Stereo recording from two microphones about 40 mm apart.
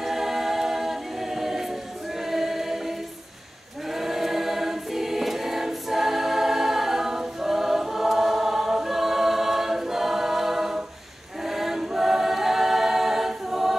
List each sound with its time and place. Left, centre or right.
0.0 s a capella: centre
2.2 s choir: centre
3.9 s choir: centre